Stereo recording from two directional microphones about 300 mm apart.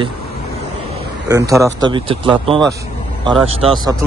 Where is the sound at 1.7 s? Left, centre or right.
Centre.